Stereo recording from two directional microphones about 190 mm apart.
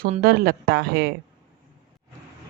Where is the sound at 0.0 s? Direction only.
50° right (ahead or behind).